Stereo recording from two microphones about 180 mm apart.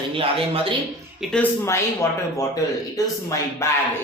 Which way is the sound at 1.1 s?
5° left (ahead or behind).